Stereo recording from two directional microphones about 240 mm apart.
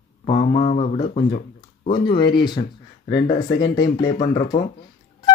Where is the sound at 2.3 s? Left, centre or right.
Centre.